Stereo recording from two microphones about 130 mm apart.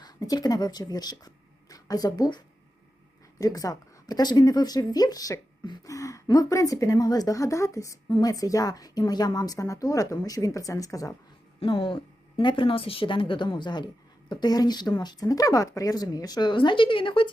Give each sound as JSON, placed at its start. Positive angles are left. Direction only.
{"t": 0.0, "sound": "speech", "side_deg": 30}
{"t": 11.6, "sound": "speech", "side_deg": 40}